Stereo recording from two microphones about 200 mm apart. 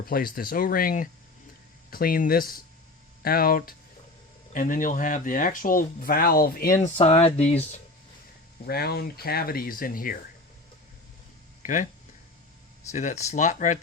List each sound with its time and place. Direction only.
0.0 s speech: 45° left (ahead or behind)
6.9 s speech: 30° left (ahead or behind)
8.6 s speech: 50° left (ahead or behind)
11.6 s speech: 40° left (ahead or behind)
12.9 s speech: 35° left (ahead or behind)